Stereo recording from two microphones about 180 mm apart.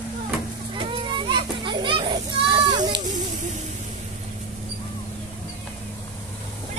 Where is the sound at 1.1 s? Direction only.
25° right (ahead or behind).